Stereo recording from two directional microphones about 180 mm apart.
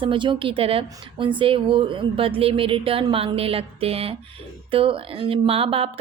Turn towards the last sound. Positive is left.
turn(degrees=-30)  # may be behind; listen again after turning